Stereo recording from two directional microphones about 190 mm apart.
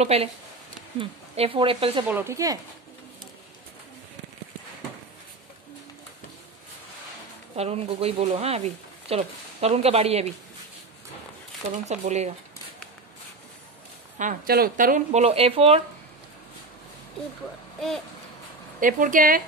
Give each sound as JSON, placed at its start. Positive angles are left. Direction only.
{"t": 0.0, "sound": "speech", "side_deg": -35}
{"t": 2.0, "sound": "speech", "side_deg": -10}
{"t": 7.5, "sound": "speech", "side_deg": -35}
{"t": 11.8, "sound": "speech", "side_deg": -35}
{"t": 14.1, "sound": "speech", "side_deg": -40}
{"t": 17.7, "sound": "speech", "side_deg": 0}
{"t": 18.8, "sound": "speech", "side_deg": -45}